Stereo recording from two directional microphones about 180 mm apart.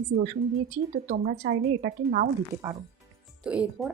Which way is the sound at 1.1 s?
55° right (ahead or behind).